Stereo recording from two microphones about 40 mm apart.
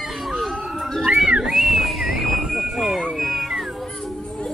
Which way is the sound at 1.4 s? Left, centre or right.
Centre.